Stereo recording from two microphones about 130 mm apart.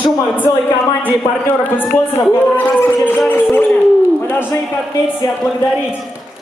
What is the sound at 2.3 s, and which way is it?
Speech, 15° left (ahead or behind).